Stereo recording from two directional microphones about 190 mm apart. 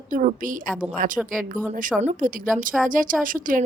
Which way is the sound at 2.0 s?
40° right (ahead or behind).